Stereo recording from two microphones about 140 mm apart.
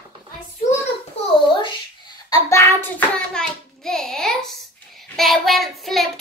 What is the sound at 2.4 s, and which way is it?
Hands, 20° left (ahead or behind).